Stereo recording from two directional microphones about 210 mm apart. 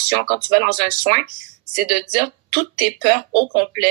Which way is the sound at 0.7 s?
50° right (ahead or behind).